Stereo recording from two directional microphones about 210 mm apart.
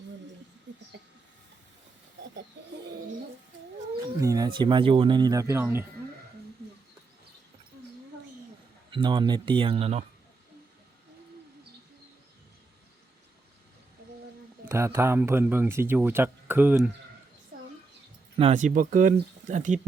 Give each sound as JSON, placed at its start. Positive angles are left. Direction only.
{"t": 0.7, "sound": "a sound", "side_deg": -55}
{"t": 4.2, "sound": "speech", "side_deg": -15}
{"t": 8.9, "sound": "speech", "side_deg": -20}
{"t": 14.6, "sound": "speech", "side_deg": -10}
{"t": 18.3, "sound": "speech", "side_deg": -30}